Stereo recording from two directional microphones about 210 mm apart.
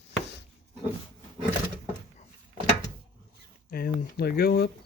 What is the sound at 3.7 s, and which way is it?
Speech, 45° left (ahead or behind).